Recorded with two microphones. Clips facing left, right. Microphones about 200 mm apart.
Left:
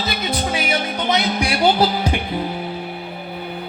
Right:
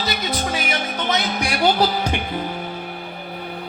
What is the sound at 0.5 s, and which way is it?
Music, 10° left (ahead or behind).